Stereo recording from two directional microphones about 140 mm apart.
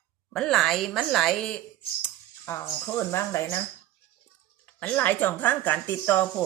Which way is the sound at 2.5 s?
20° left (ahead or behind).